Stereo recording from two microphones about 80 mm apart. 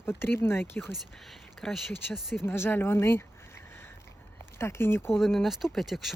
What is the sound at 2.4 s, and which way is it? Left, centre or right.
Speech, left.